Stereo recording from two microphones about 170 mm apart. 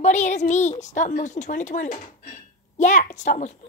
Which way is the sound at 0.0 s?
45° left (ahead or behind).